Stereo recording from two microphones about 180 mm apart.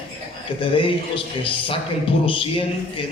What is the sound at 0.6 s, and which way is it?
A man's voice, 30° left (ahead or behind).